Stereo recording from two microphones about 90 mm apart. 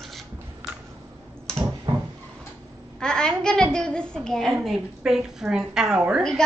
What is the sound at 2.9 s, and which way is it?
A woman's voice, 10° left (ahead or behind).